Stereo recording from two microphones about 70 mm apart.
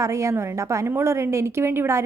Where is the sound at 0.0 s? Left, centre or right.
Right.